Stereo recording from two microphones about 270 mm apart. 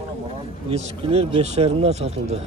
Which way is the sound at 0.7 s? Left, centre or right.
Right.